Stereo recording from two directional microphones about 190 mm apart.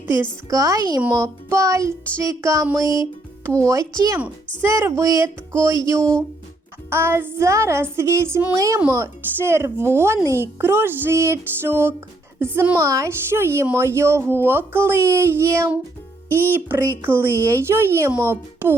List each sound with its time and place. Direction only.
0.5 s speech: 20° right (ahead or behind)
16.3 s speech: 10° left (ahead or behind)
16.6 s speech: 15° right (ahead or behind)